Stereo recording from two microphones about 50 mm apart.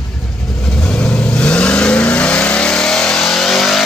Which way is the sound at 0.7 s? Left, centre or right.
Left.